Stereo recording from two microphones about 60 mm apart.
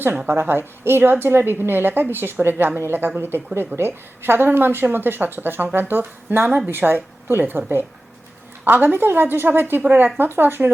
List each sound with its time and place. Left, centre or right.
0.3 s a woman's voice: right
8.6 s a woman's voice: right